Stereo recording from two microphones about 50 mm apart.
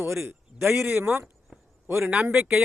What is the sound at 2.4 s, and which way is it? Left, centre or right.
Speech, centre.